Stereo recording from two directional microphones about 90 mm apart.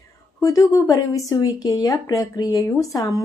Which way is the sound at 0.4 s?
40° left (ahead or behind).